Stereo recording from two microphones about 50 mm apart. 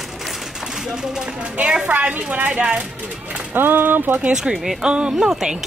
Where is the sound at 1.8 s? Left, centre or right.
Right.